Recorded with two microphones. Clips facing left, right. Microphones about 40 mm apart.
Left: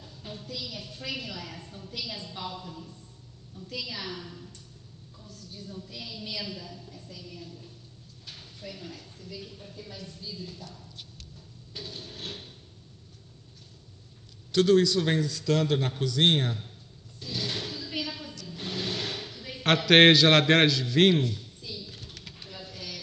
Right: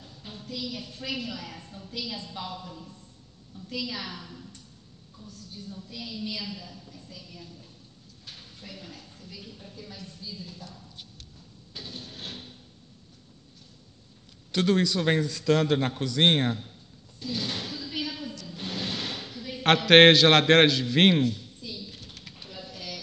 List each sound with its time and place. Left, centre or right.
1.0 s a woman's voice: centre
4.1 s a woman's voice: centre
5.9 s a woman's voice: centre
8.6 s a woman's voice: centre
14.5 s a man's voice: right
17.2 s a sound: right
19.6 s a man's voice: right
22.7 s a sound: centre